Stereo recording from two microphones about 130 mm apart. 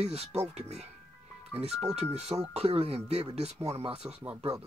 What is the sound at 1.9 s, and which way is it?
Speech, 55° right (ahead or behind).